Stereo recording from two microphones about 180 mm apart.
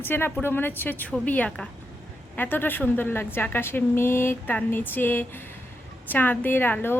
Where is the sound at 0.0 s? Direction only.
10° left (ahead or behind).